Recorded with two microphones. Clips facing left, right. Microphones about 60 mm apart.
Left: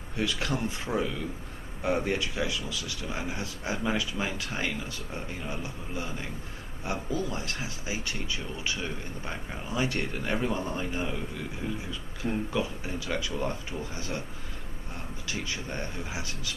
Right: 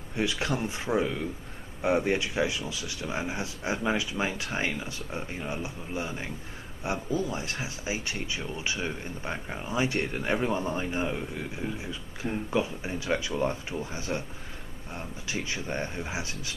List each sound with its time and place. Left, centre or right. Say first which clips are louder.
0.2 s speech: right 1 dB; right
15.2 s speech: right 2 dB; right